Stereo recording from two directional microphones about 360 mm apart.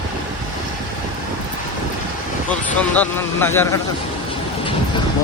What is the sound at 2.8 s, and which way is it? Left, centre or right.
Speech, centre.